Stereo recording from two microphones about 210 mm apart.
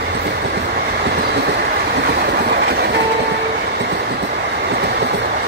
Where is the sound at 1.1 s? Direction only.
50° right (ahead or behind).